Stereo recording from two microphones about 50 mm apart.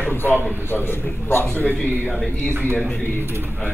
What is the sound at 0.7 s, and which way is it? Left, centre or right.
Speech, left.